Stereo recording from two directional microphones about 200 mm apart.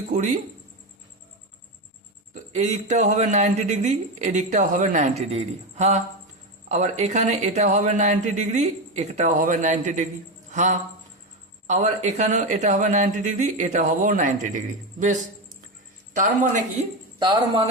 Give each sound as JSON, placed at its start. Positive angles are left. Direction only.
{"t": 2.3, "sound": "speech", "side_deg": -35}
{"t": 17.2, "sound": "speech", "side_deg": -25}